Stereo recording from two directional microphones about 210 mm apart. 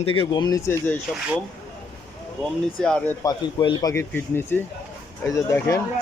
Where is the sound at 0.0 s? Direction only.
25° left (ahead or behind).